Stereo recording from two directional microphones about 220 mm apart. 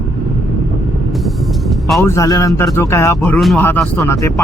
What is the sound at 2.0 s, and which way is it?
Speech, 15° left (ahead or behind).